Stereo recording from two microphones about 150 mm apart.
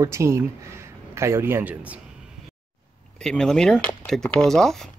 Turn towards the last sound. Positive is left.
turn(degrees=5)  # may be behind; listen again after turning